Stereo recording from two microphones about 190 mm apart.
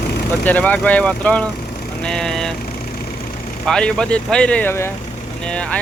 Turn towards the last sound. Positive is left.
turn(degrees=5)  # may be behind; listen again after turning